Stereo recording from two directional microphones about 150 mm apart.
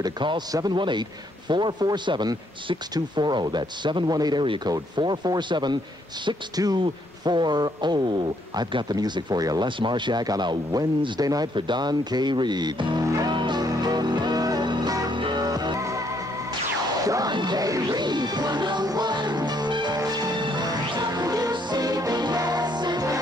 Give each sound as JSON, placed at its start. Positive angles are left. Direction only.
{"t": 0.0, "sound": "a man's voice", "side_deg": -30}
{"t": 13.0, "sound": "music", "side_deg": -25}